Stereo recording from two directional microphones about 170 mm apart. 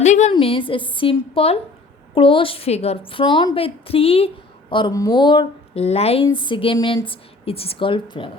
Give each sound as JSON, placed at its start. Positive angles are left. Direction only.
{"t": 0.0, "sound": "a sound", "side_deg": 45}
{"t": 0.3, "sound": "speech", "side_deg": 30}
{"t": 4.7, "sound": "speech", "side_deg": 25}